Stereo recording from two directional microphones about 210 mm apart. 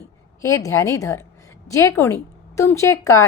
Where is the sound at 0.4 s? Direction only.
15° left (ahead or behind).